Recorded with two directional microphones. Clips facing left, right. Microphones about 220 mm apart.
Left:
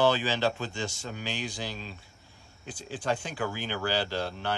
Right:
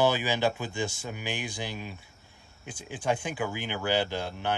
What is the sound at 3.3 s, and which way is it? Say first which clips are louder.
Speech: even; 15° right (ahead or behind).